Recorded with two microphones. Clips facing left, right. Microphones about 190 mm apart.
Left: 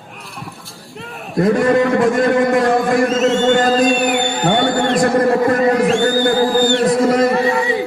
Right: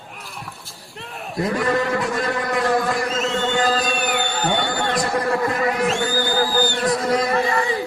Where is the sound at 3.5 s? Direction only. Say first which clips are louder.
Left 8 dB; 50° left (ahead or behind).